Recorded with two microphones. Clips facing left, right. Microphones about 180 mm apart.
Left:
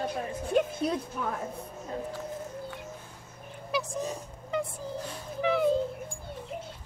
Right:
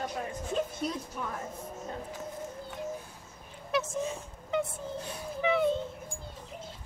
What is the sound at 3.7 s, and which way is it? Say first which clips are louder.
Speech: right 1 dB; centre (ahead or behind).